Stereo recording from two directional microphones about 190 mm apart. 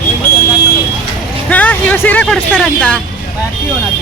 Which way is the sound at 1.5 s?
10° left (ahead or behind).